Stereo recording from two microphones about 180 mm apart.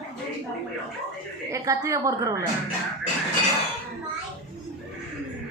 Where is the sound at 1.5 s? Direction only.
15° right (ahead or behind).